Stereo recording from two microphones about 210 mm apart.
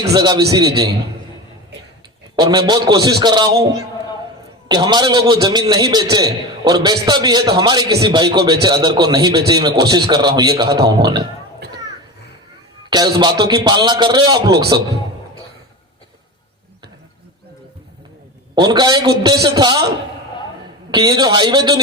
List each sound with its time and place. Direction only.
0.1 s a man's voice: 20° right (ahead or behind)
1.7 s a sound: 55° right (ahead or behind)
2.3 s a man's voice: 20° right (ahead or behind)
4.7 s a man's voice: 20° right (ahead or behind)
12.9 s a man's voice: 20° right (ahead or behind)
18.6 s a man's voice: 20° right (ahead or behind)
20.9 s a man's voice: 20° right (ahead or behind)